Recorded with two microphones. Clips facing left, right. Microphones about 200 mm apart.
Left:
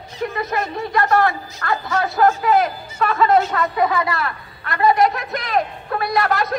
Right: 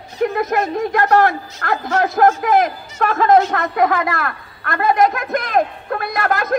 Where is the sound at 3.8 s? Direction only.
50° right (ahead or behind).